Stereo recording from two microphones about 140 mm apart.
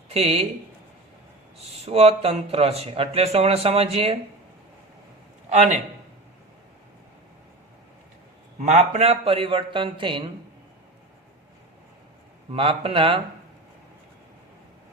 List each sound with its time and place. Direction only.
0.1 s speech: 45° right (ahead or behind)
1.7 s speech: 45° right (ahead or behind)
5.5 s a man's voice: 55° right (ahead or behind)
8.6 s a man's voice: 55° right (ahead or behind); by 10.2 s 35° right (ahead or behind)
12.5 s a man's voice: 40° right (ahead or behind)